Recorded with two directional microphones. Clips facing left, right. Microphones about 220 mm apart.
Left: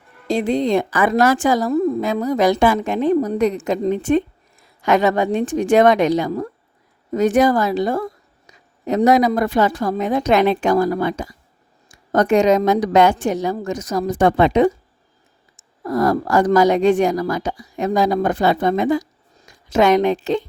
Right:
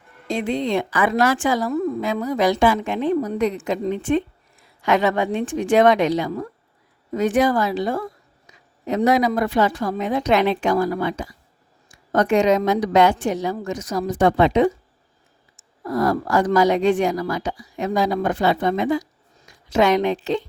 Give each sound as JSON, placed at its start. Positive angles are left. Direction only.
{"t": 0.3, "sound": "a woman's voice", "side_deg": 35}
{"t": 15.8, "sound": "a woman's voice", "side_deg": 45}